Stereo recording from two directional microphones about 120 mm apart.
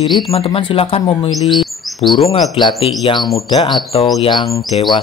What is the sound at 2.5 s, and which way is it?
Speech, 40° left (ahead or behind).